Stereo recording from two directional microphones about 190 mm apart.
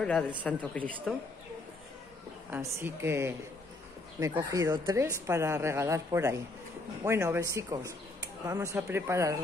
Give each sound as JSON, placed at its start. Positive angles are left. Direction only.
{"t": 0.4, "sound": "speech", "side_deg": 5}
{"t": 2.5, "sound": "a woman's voice", "side_deg": -15}